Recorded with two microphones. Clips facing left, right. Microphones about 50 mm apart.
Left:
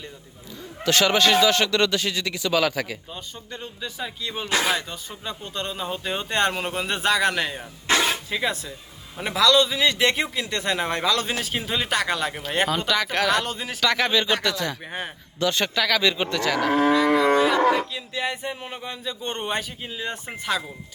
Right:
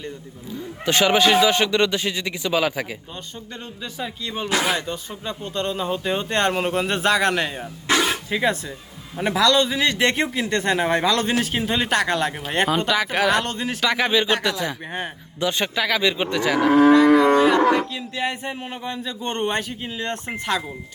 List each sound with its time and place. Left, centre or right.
0.9 s a man's voice: centre
4.0 s a man's voice: centre
4.4 s speech: right
5.5 s a man's voice: centre
7.9 s a sound: right
8.3 s a man's voice: centre
13.8 s speech: centre
17.6 s cattle: right
17.9 s speech: centre
18.9 s a man's voice: centre